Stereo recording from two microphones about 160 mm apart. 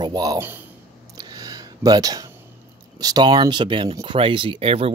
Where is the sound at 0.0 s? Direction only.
25° right (ahead or behind).